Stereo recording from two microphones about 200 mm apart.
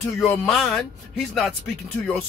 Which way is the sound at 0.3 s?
Centre (ahead or behind).